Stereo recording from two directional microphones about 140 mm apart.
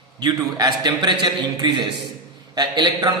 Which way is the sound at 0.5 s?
30° right (ahead or behind).